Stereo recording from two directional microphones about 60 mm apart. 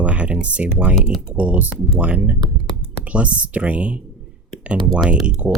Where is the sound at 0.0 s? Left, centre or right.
Right.